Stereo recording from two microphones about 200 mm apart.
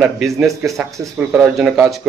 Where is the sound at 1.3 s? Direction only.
5° right (ahead or behind).